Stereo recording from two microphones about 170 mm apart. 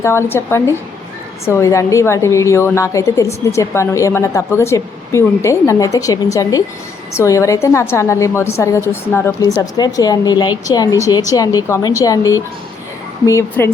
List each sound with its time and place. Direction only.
0.0 s a woman's voice: 15° left (ahead or behind)